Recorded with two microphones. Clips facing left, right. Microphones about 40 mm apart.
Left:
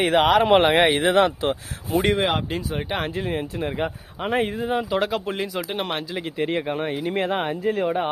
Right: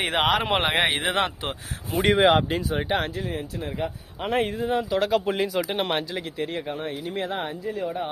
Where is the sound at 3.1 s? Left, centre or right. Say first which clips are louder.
Left 4 dB; left.